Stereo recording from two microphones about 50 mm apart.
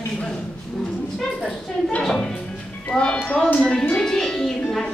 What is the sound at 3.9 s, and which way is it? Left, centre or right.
Speech, centre.